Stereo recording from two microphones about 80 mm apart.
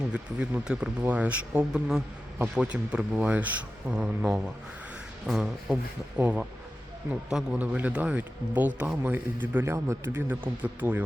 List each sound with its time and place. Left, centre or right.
0.1 s speech: centre
5.3 s beatboxing: centre
6.2 s a man's voice: centre
9.6 s speech: right
10.1 s a man's voice: right